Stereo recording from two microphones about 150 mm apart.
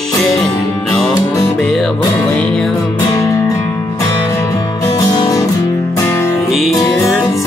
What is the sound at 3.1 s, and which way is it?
Music, 20° left (ahead or behind).